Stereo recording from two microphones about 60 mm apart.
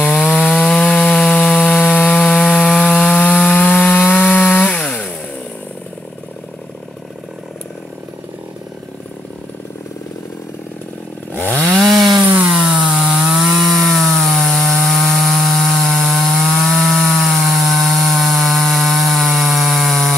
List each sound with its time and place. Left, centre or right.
0.0 s chainsaw: centre
0.5 s sawing: centre
3.2 s wood: left
4.1 s chainsaw: left
11.7 s chainsaw: centre
12.4 s wood: centre